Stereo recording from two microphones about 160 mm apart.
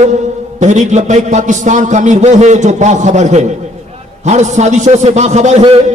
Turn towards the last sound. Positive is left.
turn(degrees=-40)  # may be behind; listen again after turning